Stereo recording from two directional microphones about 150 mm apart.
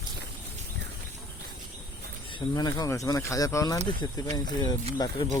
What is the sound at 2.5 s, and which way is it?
Speech, 25° left (ahead or behind).